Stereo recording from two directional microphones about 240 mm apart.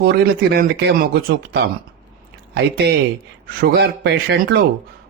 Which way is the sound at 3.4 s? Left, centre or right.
Right.